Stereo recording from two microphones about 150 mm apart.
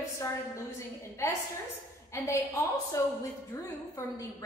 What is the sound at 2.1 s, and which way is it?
A woman's voice, 20° left (ahead or behind).